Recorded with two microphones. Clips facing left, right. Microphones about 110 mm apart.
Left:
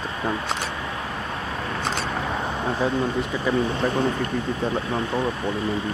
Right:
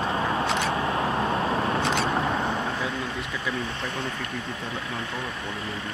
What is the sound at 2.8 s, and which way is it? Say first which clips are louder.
Speech: left 7 dB; 35° left (ahead or behind).